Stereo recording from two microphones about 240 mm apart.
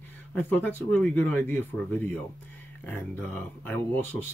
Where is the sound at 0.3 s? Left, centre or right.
Centre.